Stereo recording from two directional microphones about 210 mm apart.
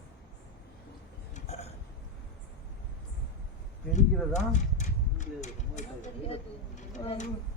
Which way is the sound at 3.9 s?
35° left (ahead or behind).